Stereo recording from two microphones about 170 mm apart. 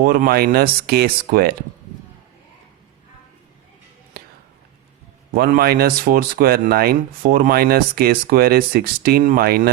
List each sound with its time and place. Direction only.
0.0 s speech: 60° right (ahead or behind)
5.3 s speech: 60° right (ahead or behind)